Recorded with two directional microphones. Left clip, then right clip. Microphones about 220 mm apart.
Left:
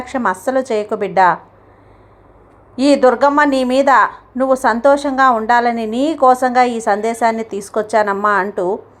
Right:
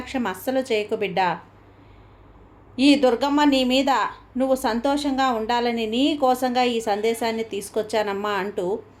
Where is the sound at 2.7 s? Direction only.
15° left (ahead or behind).